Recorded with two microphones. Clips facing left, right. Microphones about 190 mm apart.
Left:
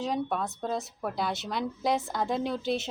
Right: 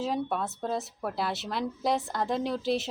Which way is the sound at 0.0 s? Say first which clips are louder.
Even; 5° right (ahead or behind).